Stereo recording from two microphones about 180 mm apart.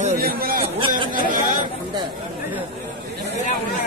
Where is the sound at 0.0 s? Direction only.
45° right (ahead or behind).